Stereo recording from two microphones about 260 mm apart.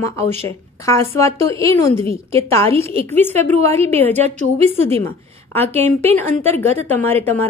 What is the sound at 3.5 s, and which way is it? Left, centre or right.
A woman's voice, right.